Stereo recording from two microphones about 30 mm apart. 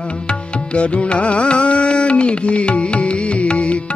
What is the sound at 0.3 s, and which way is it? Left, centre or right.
Music, left.